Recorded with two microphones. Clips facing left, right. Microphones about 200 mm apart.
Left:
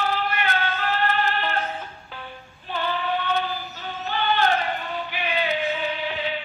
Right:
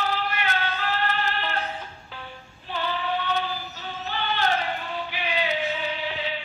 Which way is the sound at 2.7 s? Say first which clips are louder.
Left 2 dB; 55° left (ahead or behind).